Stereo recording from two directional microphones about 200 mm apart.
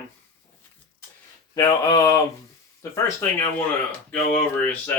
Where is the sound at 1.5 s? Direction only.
20° left (ahead or behind).